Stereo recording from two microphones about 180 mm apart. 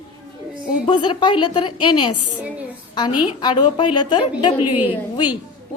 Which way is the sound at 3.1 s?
5° right (ahead or behind).